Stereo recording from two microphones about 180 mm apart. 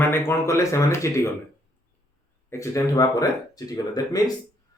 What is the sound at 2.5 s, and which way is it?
Speech, 15° left (ahead or behind).